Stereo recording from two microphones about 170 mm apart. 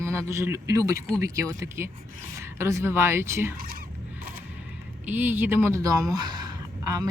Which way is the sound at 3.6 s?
60° right (ahead or behind).